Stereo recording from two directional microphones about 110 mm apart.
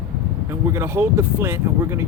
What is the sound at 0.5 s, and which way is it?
Speech, 25° right (ahead or behind).